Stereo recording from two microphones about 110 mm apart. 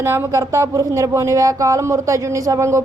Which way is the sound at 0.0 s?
20° right (ahead or behind).